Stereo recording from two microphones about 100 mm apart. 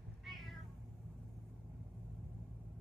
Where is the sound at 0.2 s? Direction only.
Centre (ahead or behind).